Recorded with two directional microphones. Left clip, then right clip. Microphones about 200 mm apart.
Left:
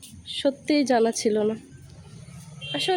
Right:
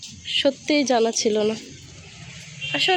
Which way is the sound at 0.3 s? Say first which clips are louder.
Right 5 dB; 5° left (ahead or behind).